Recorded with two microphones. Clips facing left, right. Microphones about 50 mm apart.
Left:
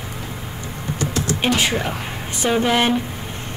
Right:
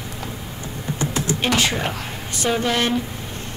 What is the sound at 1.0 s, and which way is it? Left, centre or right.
Typing, right.